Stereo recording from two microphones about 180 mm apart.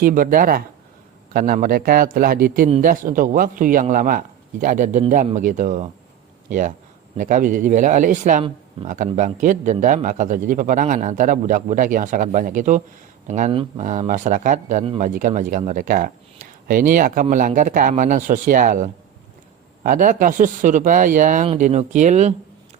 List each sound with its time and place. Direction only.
0.0 s speech: 50° right (ahead or behind)
13.5 s speech: 30° right (ahead or behind)
13.8 s speech: 45° right (ahead or behind)
21.4 s speech: 35° right (ahead or behind)